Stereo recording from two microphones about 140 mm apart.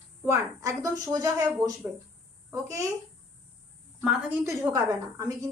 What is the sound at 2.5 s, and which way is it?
Speech, 20° right (ahead or behind).